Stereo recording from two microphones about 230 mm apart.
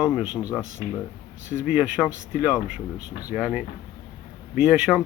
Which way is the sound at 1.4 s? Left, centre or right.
Right.